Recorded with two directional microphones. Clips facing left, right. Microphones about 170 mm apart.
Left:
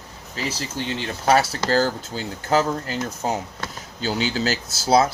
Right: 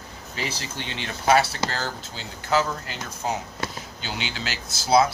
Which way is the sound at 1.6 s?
40° left (ahead or behind).